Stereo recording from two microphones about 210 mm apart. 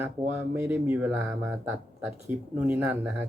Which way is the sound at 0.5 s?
10° right (ahead or behind).